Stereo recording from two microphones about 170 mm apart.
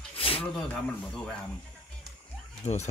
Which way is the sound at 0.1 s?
30° left (ahead or behind).